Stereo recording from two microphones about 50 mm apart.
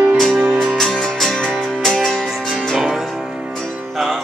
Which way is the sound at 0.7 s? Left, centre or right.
Centre.